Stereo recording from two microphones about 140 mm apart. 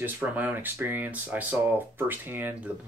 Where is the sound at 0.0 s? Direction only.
15° right (ahead or behind).